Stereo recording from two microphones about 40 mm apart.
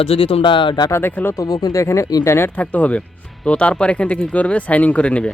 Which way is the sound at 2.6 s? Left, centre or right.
Left.